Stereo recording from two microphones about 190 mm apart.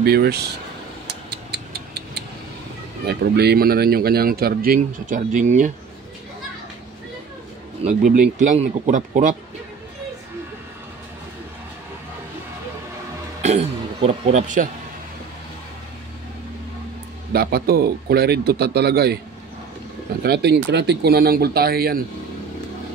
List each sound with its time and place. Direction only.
0.0 s speech: 55° right (ahead or behind)
1.3 s tick-tock: 60° right (ahead or behind)
3.1 s speech: 60° right (ahead or behind); by 5.7 s 40° right (ahead or behind)
7.8 s speech: 40° right (ahead or behind)
13.4 s speech: 35° right (ahead or behind)
17.3 s speech: 55° right (ahead or behind)
20.2 s speech: 60° right (ahead or behind)